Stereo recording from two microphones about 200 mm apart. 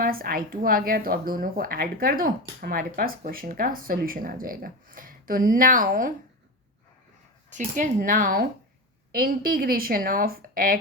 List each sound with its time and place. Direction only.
0.0 s a woman's voice: 45° right (ahead or behind)
7.5 s a woman's voice: 40° right (ahead or behind)